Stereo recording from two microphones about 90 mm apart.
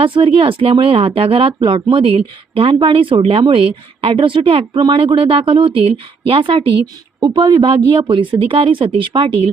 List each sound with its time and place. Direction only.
0.0 s speech: 80° right
7.3 s speech: 55° right (ahead or behind)
7.7 s speech: 70° right (ahead or behind)